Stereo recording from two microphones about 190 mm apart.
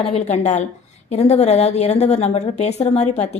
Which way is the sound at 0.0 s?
35° left (ahead or behind).